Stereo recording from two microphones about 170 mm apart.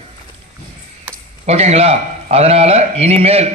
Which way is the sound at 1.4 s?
40° right (ahead or behind).